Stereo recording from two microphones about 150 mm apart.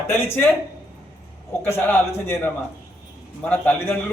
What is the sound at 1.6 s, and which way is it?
A man's voice, 15° left (ahead or behind).